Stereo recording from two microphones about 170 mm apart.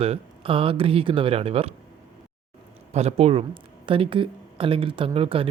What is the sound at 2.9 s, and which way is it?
Speech, 40° right (ahead or behind).